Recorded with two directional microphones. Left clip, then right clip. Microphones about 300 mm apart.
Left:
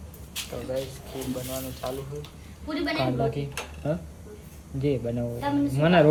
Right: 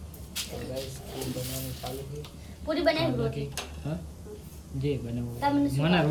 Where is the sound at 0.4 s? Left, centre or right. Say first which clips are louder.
Left 8 dB; centre.